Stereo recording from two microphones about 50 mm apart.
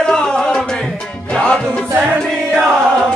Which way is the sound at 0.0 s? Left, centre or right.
Centre.